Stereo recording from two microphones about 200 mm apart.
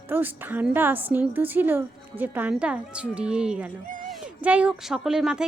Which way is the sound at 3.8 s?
40° right (ahead or behind).